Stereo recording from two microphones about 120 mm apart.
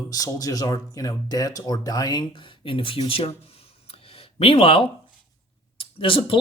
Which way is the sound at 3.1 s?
55° left (ahead or behind).